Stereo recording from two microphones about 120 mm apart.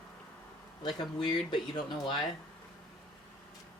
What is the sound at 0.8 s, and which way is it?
Speech, 40° left (ahead or behind).